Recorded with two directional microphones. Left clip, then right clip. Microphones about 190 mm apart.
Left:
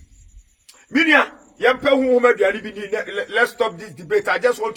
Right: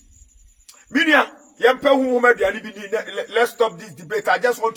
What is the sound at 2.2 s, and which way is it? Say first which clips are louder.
Speech: even; 15° right (ahead or behind).